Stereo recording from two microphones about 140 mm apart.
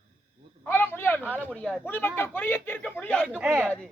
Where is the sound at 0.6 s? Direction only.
15° left (ahead or behind).